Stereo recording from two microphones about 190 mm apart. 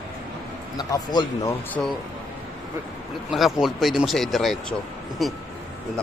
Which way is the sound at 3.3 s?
Centre (ahead or behind).